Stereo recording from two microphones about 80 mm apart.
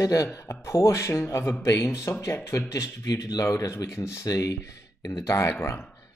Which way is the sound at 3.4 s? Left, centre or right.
Left.